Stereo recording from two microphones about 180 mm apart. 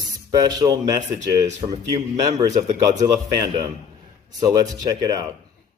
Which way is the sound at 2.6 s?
40° right (ahead or behind).